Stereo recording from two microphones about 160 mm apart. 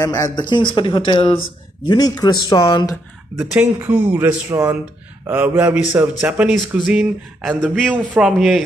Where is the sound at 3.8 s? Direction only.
10° right (ahead or behind).